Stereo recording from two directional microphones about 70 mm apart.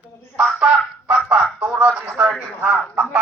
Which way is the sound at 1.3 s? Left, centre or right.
Centre.